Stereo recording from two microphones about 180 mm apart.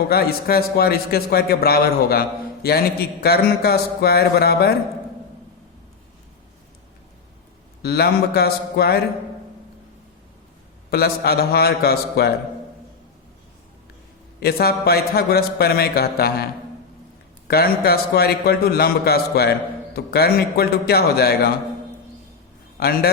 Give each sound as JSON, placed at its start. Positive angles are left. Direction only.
{"t": 0.1, "sound": "a man's voice", "side_deg": 60}
{"t": 7.8, "sound": "a man's voice", "side_deg": 60}
{"t": 10.9, "sound": "a man's voice", "side_deg": 60}
{"t": 14.4, "sound": "a man's voice", "side_deg": 60}
{"t": 17.5, "sound": "a man's voice", "side_deg": 60}
{"t": 22.8, "sound": "a man's voice", "side_deg": 55}